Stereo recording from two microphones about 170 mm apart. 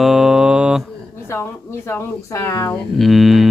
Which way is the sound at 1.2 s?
15° left (ahead or behind).